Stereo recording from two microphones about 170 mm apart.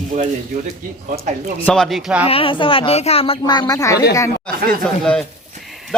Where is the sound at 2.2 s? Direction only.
30° left (ahead or behind).